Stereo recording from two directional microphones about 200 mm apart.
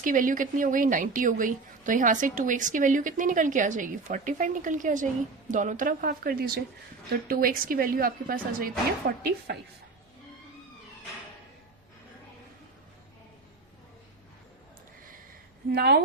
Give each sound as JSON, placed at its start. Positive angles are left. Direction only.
{"t": 0.0, "sound": "a woman's voice", "side_deg": -40}
{"t": 15.7, "sound": "speech", "side_deg": -55}